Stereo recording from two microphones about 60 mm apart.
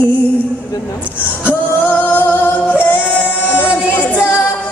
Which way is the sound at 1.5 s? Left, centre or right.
Left.